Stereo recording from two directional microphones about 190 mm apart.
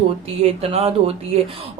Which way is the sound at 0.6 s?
30° right (ahead or behind).